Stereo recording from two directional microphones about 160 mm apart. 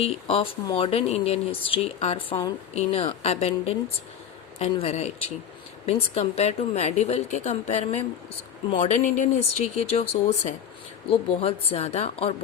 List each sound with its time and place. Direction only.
0.0 s a woman's voice: 40° left (ahead or behind)
9.1 s speech: 45° left (ahead or behind)